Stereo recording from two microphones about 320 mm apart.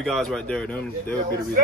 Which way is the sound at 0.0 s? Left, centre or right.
Centre.